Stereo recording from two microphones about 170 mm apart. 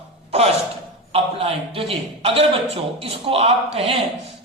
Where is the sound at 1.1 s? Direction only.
35° right (ahead or behind).